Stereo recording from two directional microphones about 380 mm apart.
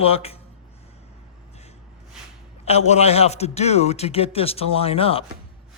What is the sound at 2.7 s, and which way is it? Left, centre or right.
A man's voice, centre.